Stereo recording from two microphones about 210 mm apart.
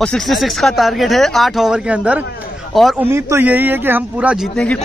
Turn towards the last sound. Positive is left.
turn(degrees=5)  # may be behind; listen again after turning